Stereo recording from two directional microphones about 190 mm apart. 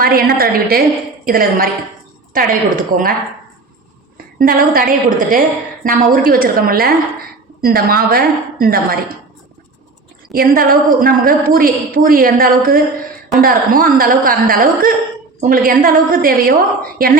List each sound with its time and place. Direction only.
0.0 s a woman's voice: 50° right (ahead or behind)
4.4 s a woman's voice: 50° right (ahead or behind)
10.3 s a woman's voice: 50° right (ahead or behind)